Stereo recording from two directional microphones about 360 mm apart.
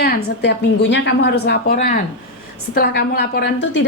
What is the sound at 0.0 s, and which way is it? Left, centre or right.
A woman's voice, left.